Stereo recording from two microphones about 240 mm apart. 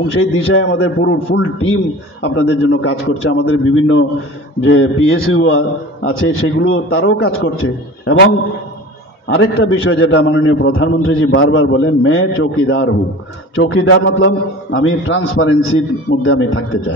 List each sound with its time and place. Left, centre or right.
0.0 s a man's voice: left
9.3 s a man's voice: left